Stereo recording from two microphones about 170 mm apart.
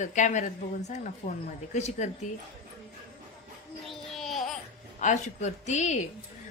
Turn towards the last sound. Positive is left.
turn(degrees=45)  # may be behind; listen again after turning